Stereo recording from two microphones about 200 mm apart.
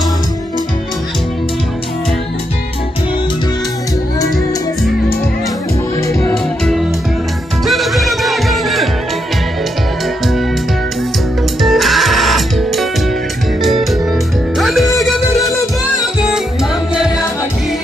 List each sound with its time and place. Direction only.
5.9 s music: 15° left (ahead or behind)
6.3 s music: centre (ahead or behind)
11.6 s music: centre (ahead or behind)